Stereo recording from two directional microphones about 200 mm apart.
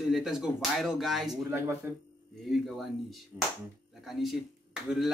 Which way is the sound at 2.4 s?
Centre (ahead or behind).